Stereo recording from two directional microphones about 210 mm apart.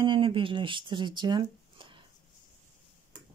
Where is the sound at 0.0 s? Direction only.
25° right (ahead or behind).